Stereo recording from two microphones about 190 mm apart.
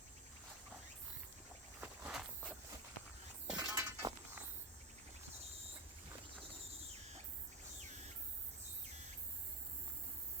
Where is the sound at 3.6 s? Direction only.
20° right (ahead or behind).